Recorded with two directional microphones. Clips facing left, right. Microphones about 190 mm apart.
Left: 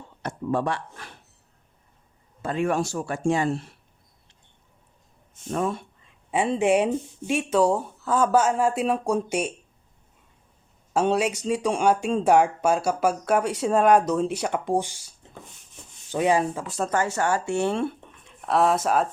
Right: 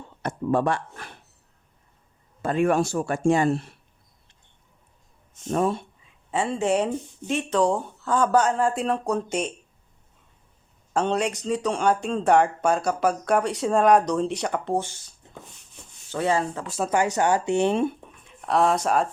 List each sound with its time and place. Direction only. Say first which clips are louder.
0.2 s speech: right 3 dB; 55° right (ahead or behind)
2.4 s speech: right 3 dB; 55° right (ahead or behind)
5.5 s speech: right 3 dB; 40° right (ahead or behind)
6.3 s speech: left 2 dB; 15° left (ahead or behind)
10.9 s speech: left 2 dB; 5° left (ahead or behind)
16.1 s speech: left 2 dB; 15° left (ahead or behind)
16.6 s speech: even; centre (ahead or behind)
16.9 s speech: right 3 dB; 15° right (ahead or behind)
18.2 s speech: even; centre (ahead or behind)